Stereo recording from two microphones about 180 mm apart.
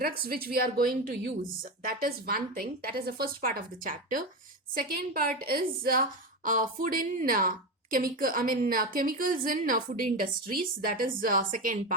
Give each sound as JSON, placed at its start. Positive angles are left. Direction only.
{"t": 0.0, "sound": "a woman's voice", "side_deg": -55}